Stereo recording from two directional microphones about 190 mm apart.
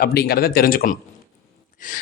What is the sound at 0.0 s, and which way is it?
Speech, 55° left (ahead or behind).